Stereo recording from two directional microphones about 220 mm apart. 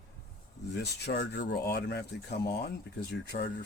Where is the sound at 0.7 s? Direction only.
50° left (ahead or behind).